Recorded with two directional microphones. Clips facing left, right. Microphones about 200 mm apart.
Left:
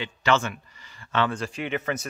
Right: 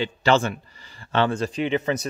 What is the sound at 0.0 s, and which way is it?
Speech, 35° right (ahead or behind).